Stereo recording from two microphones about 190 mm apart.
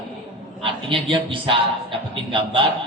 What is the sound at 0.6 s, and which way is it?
Speech, 25° right (ahead or behind).